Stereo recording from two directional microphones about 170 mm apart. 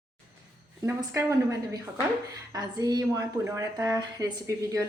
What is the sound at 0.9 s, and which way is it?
A woman's voice, 20° right (ahead or behind).